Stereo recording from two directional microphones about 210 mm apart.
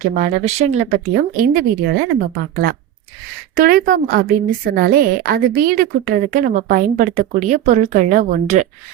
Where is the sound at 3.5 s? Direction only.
45° right (ahead or behind).